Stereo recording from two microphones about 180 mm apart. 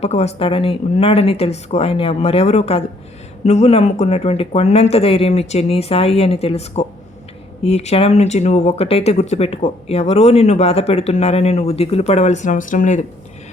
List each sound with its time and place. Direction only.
0.0 s speech: 35° left (ahead or behind)